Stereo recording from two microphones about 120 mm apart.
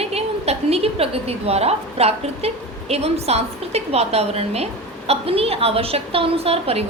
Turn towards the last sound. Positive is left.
turn(degrees=-55)  # may be behind; listen again after turning